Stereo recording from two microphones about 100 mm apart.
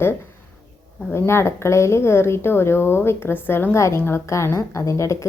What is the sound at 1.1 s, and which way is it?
A woman's voice, 25° left (ahead or behind).